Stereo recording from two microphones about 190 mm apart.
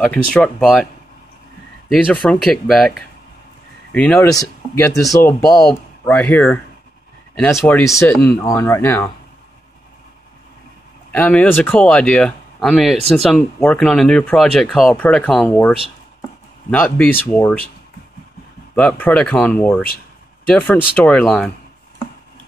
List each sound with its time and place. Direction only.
0.0 s speech: 5° left (ahead or behind)
1.9 s speech: centre (ahead or behind)
5.5 s speech: centre (ahead or behind)
11.1 s speech: 10° left (ahead or behind)
16.7 s speech: 10° left (ahead or behind)
18.8 s speech: 5° left (ahead or behind)